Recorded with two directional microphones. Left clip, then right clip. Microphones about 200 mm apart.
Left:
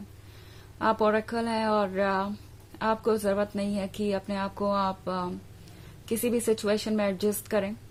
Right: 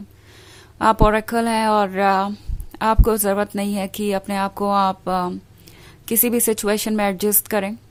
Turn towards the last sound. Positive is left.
turn(degrees=-35)  # may be behind; listen again after turning